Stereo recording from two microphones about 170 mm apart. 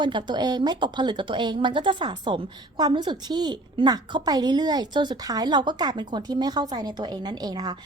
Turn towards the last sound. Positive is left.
turn(degrees=-25)  # may be behind; listen again after turning